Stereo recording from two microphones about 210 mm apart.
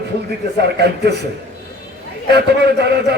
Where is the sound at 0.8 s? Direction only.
50° right (ahead or behind).